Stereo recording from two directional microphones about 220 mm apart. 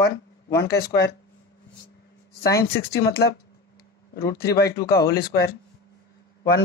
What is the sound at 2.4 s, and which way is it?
Speech, 45° left (ahead or behind).